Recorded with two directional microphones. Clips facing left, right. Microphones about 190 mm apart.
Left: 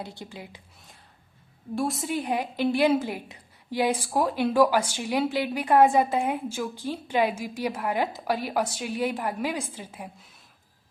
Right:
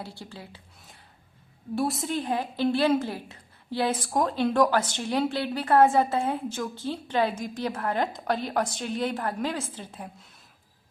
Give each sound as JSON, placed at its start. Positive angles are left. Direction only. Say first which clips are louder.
{"t": 0.0, "sound": "a woman's voice", "louder": "left 2 dB", "side_deg": 20}
{"t": 1.7, "sound": "a woman's voice", "louder": "even", "side_deg": 0}
{"t": 2.1, "sound": "a woman's voice", "louder": "left 1 dB", "side_deg": 15}